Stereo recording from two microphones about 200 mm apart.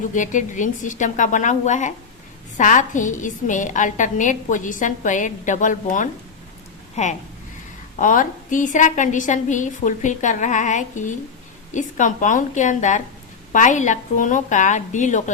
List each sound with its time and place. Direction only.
0.1 s a woman's voice: 40° left (ahead or behind)